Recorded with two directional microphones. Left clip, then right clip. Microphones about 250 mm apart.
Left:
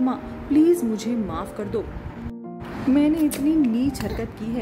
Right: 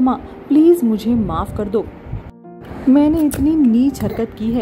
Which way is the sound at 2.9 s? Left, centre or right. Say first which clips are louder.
Right 6 dB; centre.